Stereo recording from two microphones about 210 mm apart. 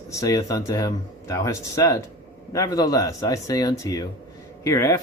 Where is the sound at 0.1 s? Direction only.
15° left (ahead or behind).